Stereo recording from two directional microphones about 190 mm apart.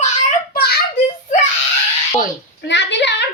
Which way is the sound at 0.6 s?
55° left (ahead or behind).